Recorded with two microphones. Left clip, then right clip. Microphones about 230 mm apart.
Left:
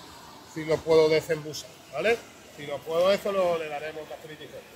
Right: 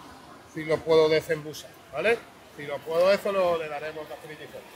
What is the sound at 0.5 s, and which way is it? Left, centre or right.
A man's voice, centre.